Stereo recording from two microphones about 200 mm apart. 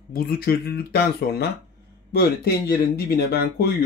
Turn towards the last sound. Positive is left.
turn(degrees=50)  # may be behind; listen again after turning